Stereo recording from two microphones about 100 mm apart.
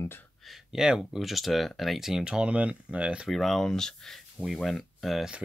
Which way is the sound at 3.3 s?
Centre (ahead or behind).